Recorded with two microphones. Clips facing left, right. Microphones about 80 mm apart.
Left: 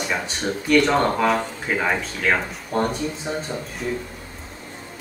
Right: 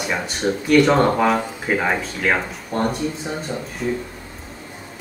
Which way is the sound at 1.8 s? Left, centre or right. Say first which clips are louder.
Right 1 dB; centre.